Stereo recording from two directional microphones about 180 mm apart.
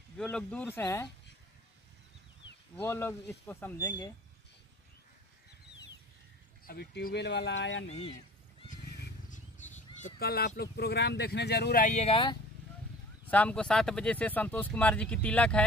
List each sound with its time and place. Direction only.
0.2 s speech: 5° left (ahead or behind)
2.8 s speech: 15° left (ahead or behind)
6.6 s speech: 60° left (ahead or behind); by 7.8 s 85° left
9.3 s a sound: 40° left (ahead or behind)
10.1 s speech: 60° left (ahead or behind)
11.8 s speech: 35° left (ahead or behind)
13.3 s speech: 5° left (ahead or behind)